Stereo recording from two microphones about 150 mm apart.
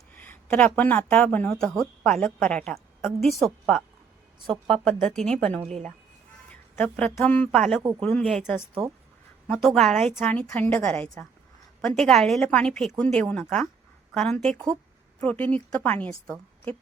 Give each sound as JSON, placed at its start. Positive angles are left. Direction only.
{"t": 0.2, "sound": "speech", "side_deg": 10}
{"t": 4.9, "sound": "a woman's voice", "side_deg": 5}
{"t": 6.7, "sound": "speech", "side_deg": 10}
{"t": 7.8, "sound": "speech", "side_deg": -25}
{"t": 8.0, "sound": "a woman's voice", "side_deg": 5}
{"t": 9.6, "sound": "a woman's voice", "side_deg": 0}